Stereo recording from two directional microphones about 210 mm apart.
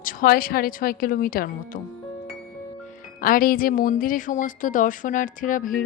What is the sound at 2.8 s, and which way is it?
Speech, 40° left (ahead or behind).